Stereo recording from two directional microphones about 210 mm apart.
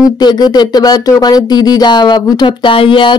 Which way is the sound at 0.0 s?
20° left (ahead or behind).